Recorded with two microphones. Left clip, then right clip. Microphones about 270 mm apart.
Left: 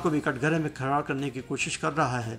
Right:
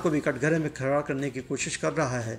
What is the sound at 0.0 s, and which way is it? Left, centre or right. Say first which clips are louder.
A man's voice: right 1 dB; centre.